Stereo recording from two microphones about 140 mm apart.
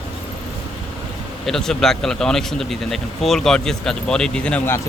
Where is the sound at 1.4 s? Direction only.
5° left (ahead or behind).